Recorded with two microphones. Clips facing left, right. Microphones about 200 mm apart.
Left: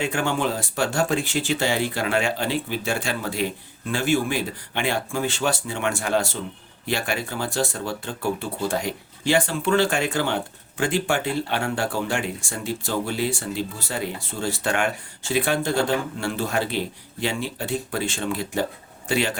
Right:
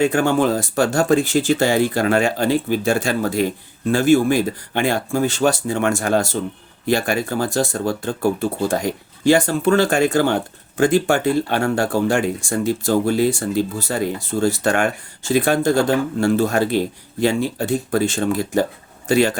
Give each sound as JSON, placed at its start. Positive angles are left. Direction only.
{"t": 0.0, "sound": "speech", "side_deg": -40}